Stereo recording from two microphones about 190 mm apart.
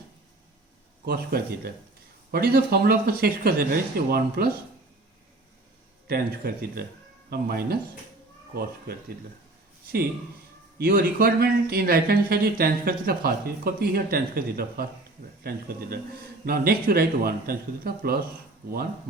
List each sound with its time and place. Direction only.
1.0 s speech: 55° right (ahead or behind)
6.1 s speech: 55° right (ahead or behind)
10.8 s speech: 50° right (ahead or behind)